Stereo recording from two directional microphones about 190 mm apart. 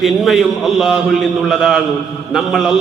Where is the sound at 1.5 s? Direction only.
Centre (ahead or behind).